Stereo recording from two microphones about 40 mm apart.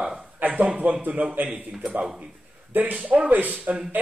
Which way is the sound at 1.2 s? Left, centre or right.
Right.